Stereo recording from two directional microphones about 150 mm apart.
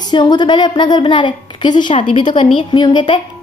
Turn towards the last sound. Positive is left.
turn(degrees=35)  # may be behind; listen again after turning